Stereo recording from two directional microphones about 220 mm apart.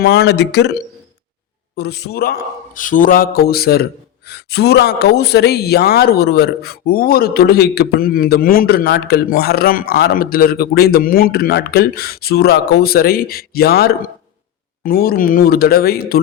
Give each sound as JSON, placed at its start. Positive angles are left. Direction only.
{"t": 0.0, "sound": "speech", "side_deg": 45}